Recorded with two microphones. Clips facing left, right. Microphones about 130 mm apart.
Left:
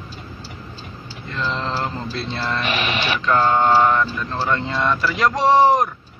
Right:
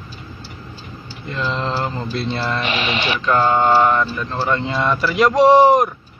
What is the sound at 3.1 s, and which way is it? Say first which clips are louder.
Speech: right 1 dB; centre (ahead or behind).